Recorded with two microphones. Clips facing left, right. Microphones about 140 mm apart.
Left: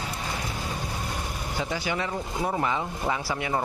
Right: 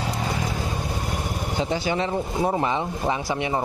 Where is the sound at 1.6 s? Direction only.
25° right (ahead or behind).